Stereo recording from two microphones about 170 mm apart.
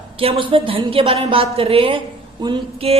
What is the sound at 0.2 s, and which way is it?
A woman's voice, 35° right (ahead or behind).